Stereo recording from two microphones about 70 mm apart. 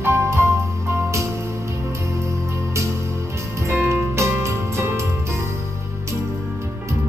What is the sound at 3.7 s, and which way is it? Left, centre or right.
Music, right.